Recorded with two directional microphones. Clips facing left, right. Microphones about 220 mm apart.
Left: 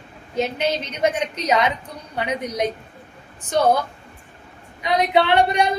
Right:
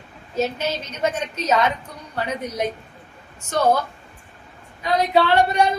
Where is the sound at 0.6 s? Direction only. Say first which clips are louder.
Left 3 dB; 15° left (ahead or behind).